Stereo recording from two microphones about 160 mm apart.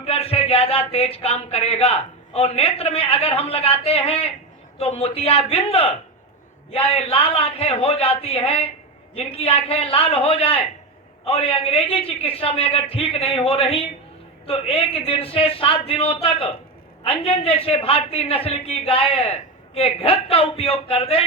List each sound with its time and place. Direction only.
0.0 s speech: 40° left (ahead or behind)